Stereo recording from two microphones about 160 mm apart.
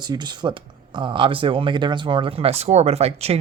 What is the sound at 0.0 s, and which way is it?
Speech, 25° right (ahead or behind).